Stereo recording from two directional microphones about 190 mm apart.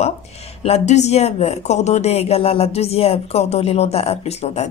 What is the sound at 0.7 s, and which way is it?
Speech, 35° left (ahead or behind).